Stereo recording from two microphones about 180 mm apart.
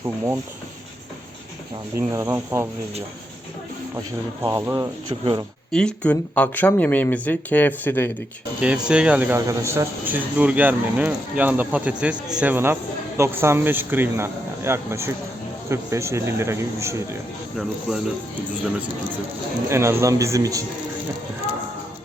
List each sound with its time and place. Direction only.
2.0 s speech: 15° right (ahead or behind)
4.4 s speech: 20° right (ahead or behind)
5.7 s speech: 5° left (ahead or behind)
8.6 s speech: 5° right (ahead or behind)
19.6 s speech: 15° right (ahead or behind)